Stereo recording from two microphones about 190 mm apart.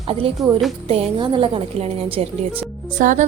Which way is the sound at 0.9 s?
30° right (ahead or behind).